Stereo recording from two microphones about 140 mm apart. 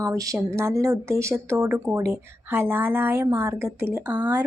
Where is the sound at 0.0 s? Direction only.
25° right (ahead or behind).